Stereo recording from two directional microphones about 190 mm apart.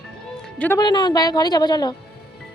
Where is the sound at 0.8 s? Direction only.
20° left (ahead or behind).